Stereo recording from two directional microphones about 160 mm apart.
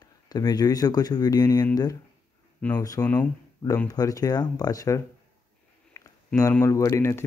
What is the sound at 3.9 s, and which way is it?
Speech, 25° left (ahead or behind).